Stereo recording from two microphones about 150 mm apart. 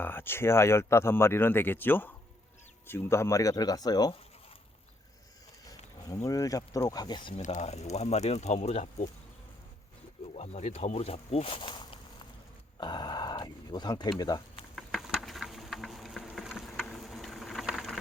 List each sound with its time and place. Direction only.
0.0 s speech: 15° left (ahead or behind)
5.6 s speech: 20° left (ahead or behind)
7.4 s speech: 50° left (ahead or behind)
10.3 s speech: 45° left (ahead or behind); by 14.6 s 25° left (ahead or behind)
14.8 s insect: centre (ahead or behind)
16.8 s a sound: centre (ahead or behind)